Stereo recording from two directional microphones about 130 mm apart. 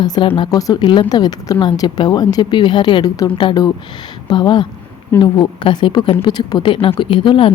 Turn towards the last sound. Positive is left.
turn(degrees=40)  # may be behind; listen again after turning